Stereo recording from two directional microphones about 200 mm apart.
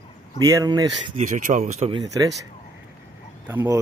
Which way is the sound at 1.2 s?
40° right (ahead or behind).